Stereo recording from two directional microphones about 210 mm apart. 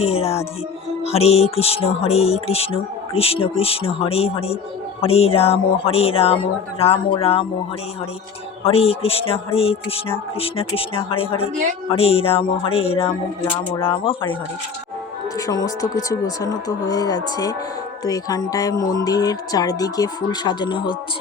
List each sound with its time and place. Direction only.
0.0 s speech: 30° left (ahead or behind)
8.6 s speech: 30° left (ahead or behind)
15.4 s speech: 15° left (ahead or behind)